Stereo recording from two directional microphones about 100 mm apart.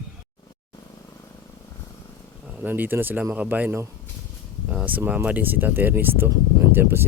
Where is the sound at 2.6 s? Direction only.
20° right (ahead or behind).